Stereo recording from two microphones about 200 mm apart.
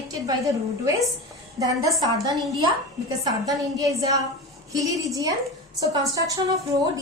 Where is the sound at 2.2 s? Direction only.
20° right (ahead or behind).